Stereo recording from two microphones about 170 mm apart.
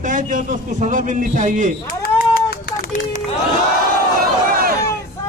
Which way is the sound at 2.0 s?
60° left (ahead or behind).